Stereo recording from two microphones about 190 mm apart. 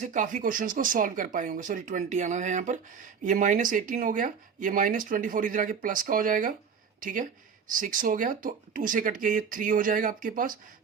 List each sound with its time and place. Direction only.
0.0 s speech: 45° right (ahead or behind)